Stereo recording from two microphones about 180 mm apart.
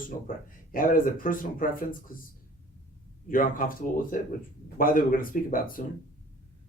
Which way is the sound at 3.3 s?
50° left (ahead or behind).